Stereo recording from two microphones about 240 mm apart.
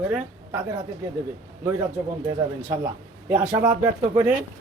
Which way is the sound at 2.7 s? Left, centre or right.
Centre.